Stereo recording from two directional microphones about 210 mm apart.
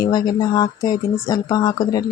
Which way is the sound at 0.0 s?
20° left (ahead or behind).